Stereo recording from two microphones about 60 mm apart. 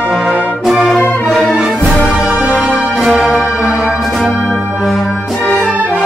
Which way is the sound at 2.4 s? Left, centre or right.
Centre.